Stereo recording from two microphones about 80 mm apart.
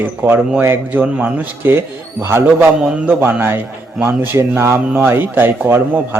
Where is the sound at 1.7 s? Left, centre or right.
Right.